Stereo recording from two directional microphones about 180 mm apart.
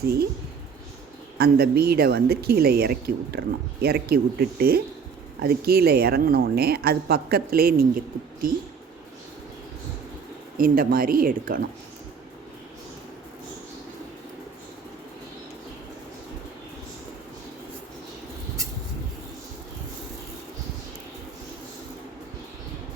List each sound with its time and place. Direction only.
1.4 s speech: 60° right (ahead or behind)
10.6 s speech: 50° right (ahead or behind)